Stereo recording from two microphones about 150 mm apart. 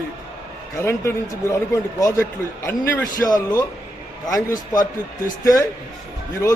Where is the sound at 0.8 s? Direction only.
20° left (ahead or behind).